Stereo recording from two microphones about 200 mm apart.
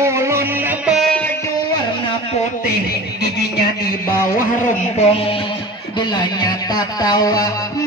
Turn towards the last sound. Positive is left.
turn(degrees=20)  # may be behind; listen again after turning